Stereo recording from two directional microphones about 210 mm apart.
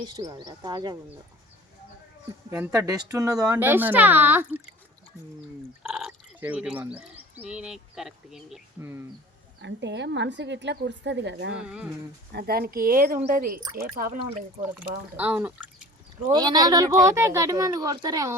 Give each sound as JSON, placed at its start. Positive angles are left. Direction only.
{"t": 0.0, "sound": "speech", "side_deg": -20}
{"t": 2.5, "sound": "speech", "side_deg": -10}
{"t": 5.8, "sound": "speech", "side_deg": 0}
{"t": 8.8, "sound": "speech", "side_deg": -10}
{"t": 9.6, "sound": "a woman's voice", "side_deg": -55}
{"t": 11.5, "sound": "speech", "side_deg": -5}
{"t": 12.3, "sound": "speech", "side_deg": -50}
{"t": 14.8, "sound": "speech", "side_deg": -10}
{"t": 16.3, "sound": "speech", "side_deg": -20}